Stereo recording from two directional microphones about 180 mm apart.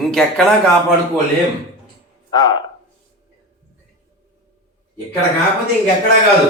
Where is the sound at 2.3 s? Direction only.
25° left (ahead or behind).